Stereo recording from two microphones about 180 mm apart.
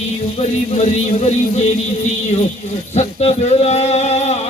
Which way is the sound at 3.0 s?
35° left (ahead or behind).